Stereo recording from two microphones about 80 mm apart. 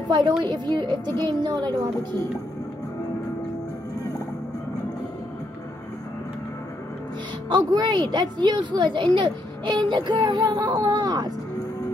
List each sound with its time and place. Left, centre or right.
0.1 s a woman's voice: right
7.4 s a woman's voice: right